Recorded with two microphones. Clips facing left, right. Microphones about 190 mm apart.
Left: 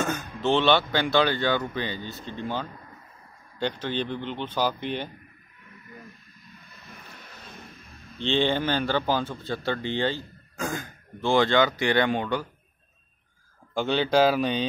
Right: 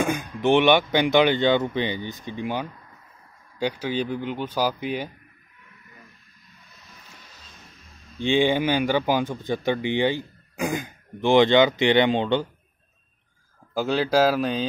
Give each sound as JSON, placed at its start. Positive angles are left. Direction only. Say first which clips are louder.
{"t": 0.0, "sound": "speech", "louder": "right 4 dB", "side_deg": -15}
{"t": 6.9, "sound": "vehicle", "louder": "left 5 dB", "side_deg": 60}
{"t": 8.2, "sound": "speech", "louder": "right 4 dB", "side_deg": -10}
{"t": 13.7, "sound": "speech", "louder": "right 1 dB", "side_deg": -5}